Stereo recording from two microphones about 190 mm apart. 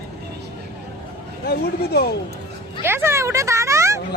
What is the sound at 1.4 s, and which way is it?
Speech, 55° left (ahead or behind).